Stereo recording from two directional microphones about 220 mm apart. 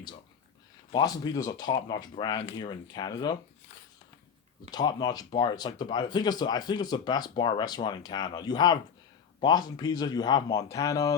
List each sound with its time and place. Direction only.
0.9 s speech: 20° left (ahead or behind)
4.7 s speech: 20° left (ahead or behind)